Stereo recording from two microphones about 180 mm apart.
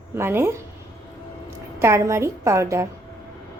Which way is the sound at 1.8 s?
15° right (ahead or behind).